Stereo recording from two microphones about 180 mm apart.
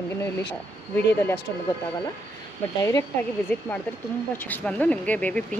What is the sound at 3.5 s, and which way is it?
Speech, 10° left (ahead or behind).